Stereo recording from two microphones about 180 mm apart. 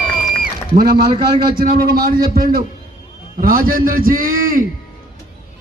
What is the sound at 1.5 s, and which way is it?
A man's voice, 55° right (ahead or behind).